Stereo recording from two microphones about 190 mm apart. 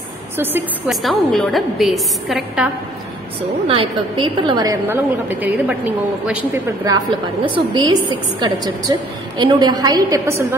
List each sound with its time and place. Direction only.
0.4 s a woman's voice: 10° right (ahead or behind)
0.8 s a woman's voice: centre (ahead or behind)
3.6 s a woman's voice: 30° right (ahead or behind)